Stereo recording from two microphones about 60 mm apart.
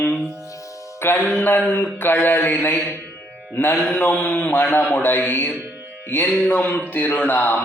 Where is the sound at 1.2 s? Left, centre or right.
Left.